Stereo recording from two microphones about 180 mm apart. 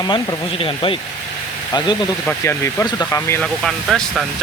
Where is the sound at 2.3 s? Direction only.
15° left (ahead or behind).